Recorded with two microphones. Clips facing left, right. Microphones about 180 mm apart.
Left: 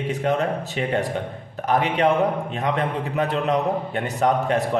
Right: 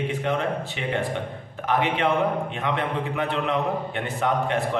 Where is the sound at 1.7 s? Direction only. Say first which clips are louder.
Left 3 dB; 40° left (ahead or behind).